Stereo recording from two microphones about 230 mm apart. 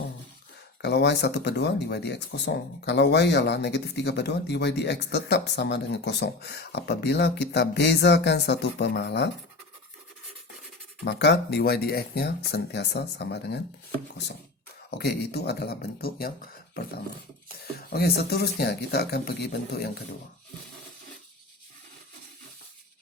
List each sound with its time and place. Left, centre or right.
0.8 s speech: left
11.0 s speech: left
14.8 s speech: left
17.9 s speech: left